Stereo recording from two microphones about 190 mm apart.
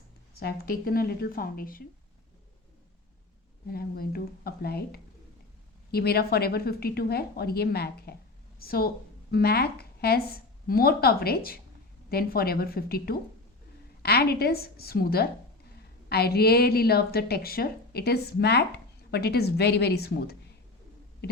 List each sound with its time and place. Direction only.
0.3 s speech: 55° left (ahead or behind)
3.7 s a woman's voice: 50° left (ahead or behind)